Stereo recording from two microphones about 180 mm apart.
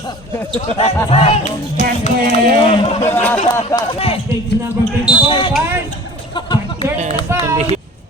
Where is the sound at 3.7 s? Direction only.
30° left (ahead or behind).